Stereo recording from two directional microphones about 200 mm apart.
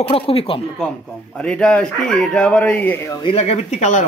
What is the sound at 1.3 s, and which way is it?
A man's voice, 5° left (ahead or behind).